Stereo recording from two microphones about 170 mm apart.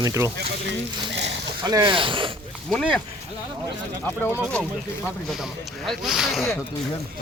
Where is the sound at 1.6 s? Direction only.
25° right (ahead or behind).